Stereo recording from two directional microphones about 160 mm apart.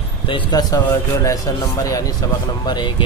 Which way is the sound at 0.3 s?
25° left (ahead or behind).